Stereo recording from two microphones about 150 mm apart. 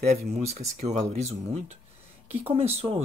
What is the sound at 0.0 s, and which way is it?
Speech, 45° right (ahead or behind).